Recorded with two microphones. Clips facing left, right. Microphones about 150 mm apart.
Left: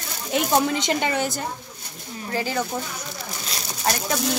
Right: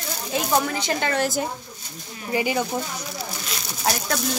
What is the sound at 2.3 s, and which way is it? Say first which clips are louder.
Speech: right 3 dB; 15° right (ahead or behind).